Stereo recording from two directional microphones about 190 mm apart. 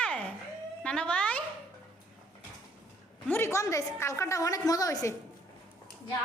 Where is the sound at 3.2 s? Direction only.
10° left (ahead or behind).